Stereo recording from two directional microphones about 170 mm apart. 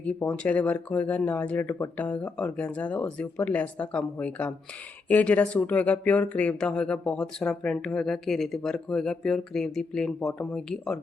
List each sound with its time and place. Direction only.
0.0 s speech: 10° left (ahead or behind)